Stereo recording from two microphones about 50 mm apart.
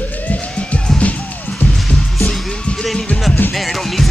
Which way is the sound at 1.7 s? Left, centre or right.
Centre.